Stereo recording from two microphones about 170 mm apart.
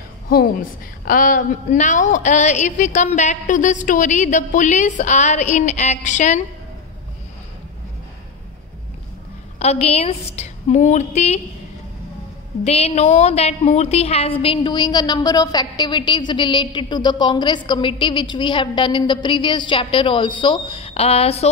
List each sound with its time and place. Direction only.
1.0 s a woman's voice: 50° left (ahead or behind)
9.6 s a woman's voice: 40° left (ahead or behind)
12.6 s a woman's voice: 40° left (ahead or behind)